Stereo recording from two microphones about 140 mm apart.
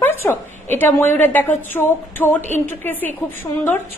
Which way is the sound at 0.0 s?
15° left (ahead or behind).